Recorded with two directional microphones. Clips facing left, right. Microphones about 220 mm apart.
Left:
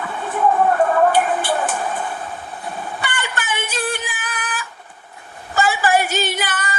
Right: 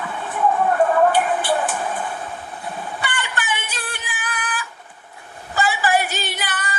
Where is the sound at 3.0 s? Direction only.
45° left (ahead or behind).